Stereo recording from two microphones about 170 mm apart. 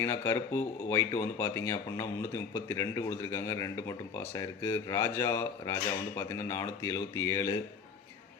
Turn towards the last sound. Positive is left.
turn(degrees=15)  # may be behind; listen again after turning